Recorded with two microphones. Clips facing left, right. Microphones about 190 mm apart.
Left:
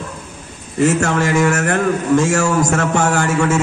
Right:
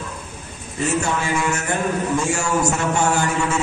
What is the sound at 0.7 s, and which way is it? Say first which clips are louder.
A man's voice: left 7 dB; 90° left.